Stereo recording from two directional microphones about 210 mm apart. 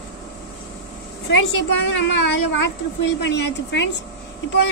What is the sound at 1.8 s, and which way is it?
Speech, 60° left (ahead or behind).